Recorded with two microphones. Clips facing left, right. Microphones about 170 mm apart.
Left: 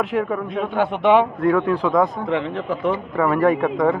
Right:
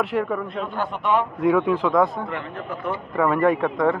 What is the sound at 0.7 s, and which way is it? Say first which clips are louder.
Speech: left 7 dB; 75° left (ahead or behind).